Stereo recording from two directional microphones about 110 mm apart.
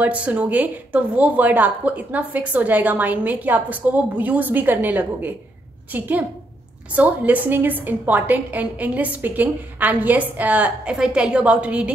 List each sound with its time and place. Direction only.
0.0 s a woman's voice: 15° right (ahead or behind)